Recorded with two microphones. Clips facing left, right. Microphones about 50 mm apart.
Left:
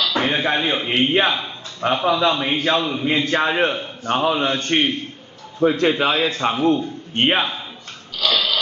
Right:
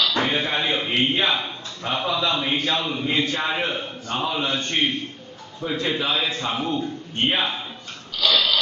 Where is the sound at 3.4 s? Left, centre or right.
Left.